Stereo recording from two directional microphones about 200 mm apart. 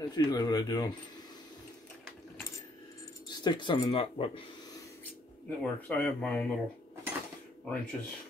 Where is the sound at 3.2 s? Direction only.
20° left (ahead or behind).